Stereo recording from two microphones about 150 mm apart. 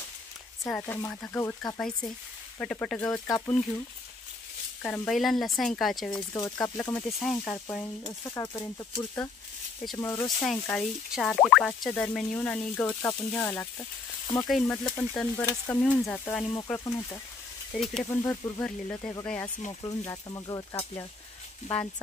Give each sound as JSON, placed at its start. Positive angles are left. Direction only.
{"t": 0.7, "sound": "speech", "side_deg": 5}
{"t": 4.8, "sound": "speech", "side_deg": 5}
{"t": 6.1, "sound": "speech", "side_deg": 20}
{"t": 6.6, "sound": "speech", "side_deg": 10}
{"t": 8.0, "sound": "speech", "side_deg": 25}
{"t": 10.4, "sound": "speech", "side_deg": 5}
{"t": 14.6, "sound": "speech", "side_deg": 10}
{"t": 15.6, "sound": "speech", "side_deg": 15}
{"t": 17.7, "sound": "speech", "side_deg": 0}
{"t": 18.2, "sound": "speech", "side_deg": 15}
{"t": 19.8, "sound": "speech", "side_deg": 25}